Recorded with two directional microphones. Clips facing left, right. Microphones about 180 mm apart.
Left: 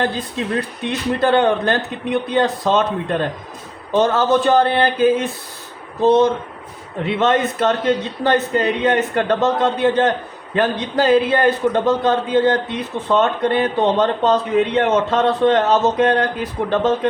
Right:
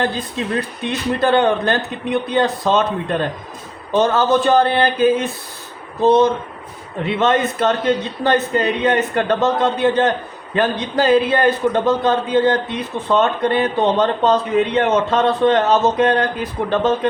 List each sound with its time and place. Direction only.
0.0 s a man's voice: 60° left (ahead or behind)